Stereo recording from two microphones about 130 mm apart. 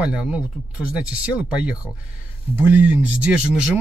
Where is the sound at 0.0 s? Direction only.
10° right (ahead or behind).